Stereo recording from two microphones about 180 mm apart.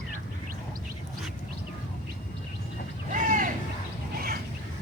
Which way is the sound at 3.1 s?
45° right (ahead or behind).